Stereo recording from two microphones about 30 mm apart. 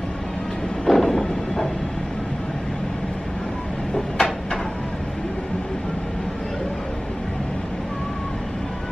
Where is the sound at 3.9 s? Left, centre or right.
Left.